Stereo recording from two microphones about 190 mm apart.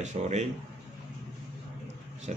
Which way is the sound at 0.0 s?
40° right (ahead or behind).